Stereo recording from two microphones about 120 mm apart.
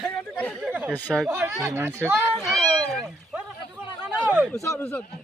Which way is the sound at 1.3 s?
20° right (ahead or behind).